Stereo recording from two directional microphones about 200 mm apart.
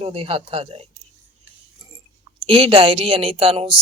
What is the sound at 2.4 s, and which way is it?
Speech, 25° right (ahead or behind).